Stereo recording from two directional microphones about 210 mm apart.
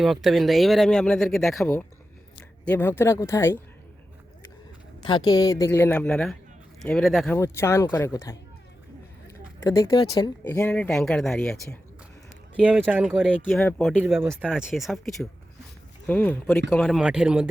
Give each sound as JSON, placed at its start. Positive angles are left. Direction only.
{"t": 0.0, "sound": "speech", "side_deg": 0}
{"t": 5.0, "sound": "speech", "side_deg": 20}
{"t": 7.3, "sound": "speech", "side_deg": 15}
{"t": 9.6, "sound": "speech", "side_deg": 15}
{"t": 13.6, "sound": "speech", "side_deg": 5}
{"t": 14.0, "sound": "speech", "side_deg": -10}